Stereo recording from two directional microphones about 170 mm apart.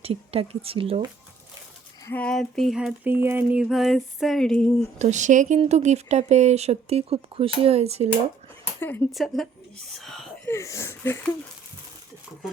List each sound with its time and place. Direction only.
0.0 s speech: 35° right (ahead or behind)
2.0 s a sound: 10° left (ahead or behind)
4.9 s speech: 45° right (ahead or behind)
8.8 s speech: 10° left (ahead or behind)
9.1 s a sound: centre (ahead or behind)
10.4 s speech: 15° left (ahead or behind)